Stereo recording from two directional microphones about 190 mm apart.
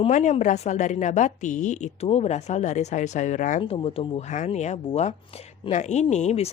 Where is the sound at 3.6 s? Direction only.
30° left (ahead or behind).